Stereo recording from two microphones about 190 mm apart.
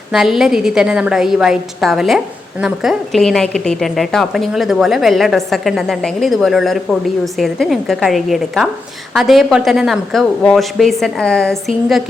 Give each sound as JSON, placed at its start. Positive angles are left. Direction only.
{"t": 0.1, "sound": "a woman's voice", "side_deg": 0}